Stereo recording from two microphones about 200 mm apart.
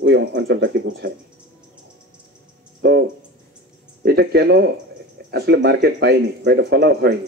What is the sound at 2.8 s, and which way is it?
Speech, 55° right (ahead or behind).